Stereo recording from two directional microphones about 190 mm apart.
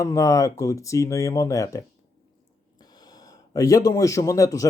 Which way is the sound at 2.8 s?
20° left (ahead or behind).